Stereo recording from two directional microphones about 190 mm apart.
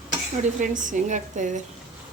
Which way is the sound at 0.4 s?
45° right (ahead or behind).